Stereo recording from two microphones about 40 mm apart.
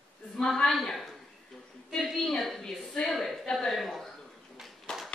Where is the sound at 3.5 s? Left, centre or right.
Centre.